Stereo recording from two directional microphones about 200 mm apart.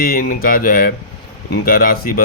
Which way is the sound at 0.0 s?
45° left (ahead or behind).